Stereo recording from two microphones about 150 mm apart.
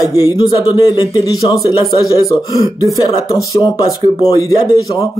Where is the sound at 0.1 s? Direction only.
25° left (ahead or behind).